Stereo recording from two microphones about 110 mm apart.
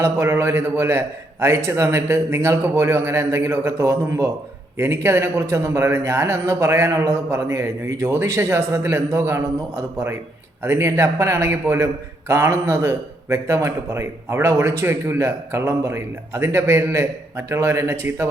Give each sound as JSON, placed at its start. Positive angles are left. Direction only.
{"t": 0.0, "sound": "a man's voice", "side_deg": -25}